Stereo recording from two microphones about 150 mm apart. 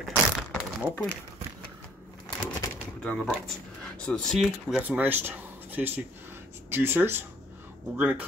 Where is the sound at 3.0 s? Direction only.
5° left (ahead or behind).